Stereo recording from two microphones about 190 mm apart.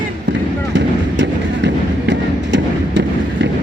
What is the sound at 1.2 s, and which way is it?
Music, 70° right (ahead or behind).